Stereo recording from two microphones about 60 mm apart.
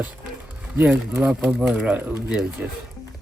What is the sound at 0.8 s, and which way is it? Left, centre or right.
Speech, right.